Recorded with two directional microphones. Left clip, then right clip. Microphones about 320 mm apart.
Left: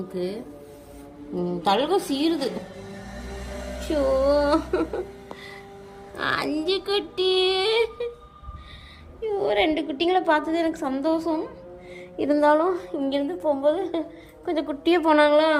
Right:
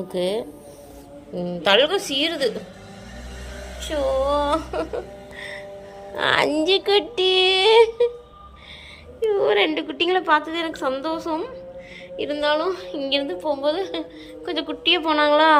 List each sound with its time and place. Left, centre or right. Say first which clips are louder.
0.1 s speech: right 10 dB; centre
4.4 s a woman's voice: even; centre
6.1 s speech: right 6 dB; centre
9.2 s a woman's voice: right 4 dB; centre